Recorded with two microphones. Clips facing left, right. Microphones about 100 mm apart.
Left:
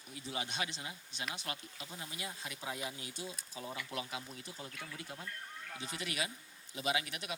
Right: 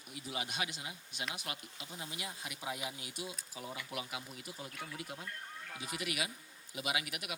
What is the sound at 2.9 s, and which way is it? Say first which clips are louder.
A man's voice: even; 30° left (ahead or behind).